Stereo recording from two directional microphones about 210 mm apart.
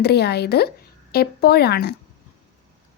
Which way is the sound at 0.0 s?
50° left (ahead or behind).